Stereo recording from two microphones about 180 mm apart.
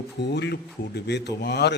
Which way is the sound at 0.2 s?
70° left (ahead or behind).